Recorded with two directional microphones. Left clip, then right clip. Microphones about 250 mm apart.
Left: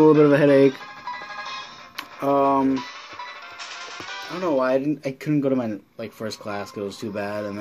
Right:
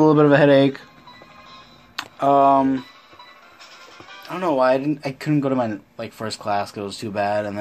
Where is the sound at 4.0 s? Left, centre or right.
Left.